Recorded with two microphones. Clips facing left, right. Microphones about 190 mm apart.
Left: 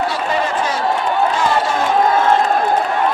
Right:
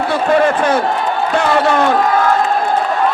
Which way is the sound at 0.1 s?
55° right (ahead or behind).